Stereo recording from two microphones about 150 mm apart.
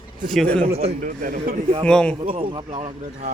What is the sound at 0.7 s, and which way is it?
Speech, 40° right (ahead or behind).